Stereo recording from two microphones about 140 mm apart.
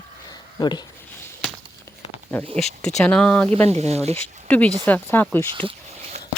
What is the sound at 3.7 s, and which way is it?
Speech, 50° right (ahead or behind).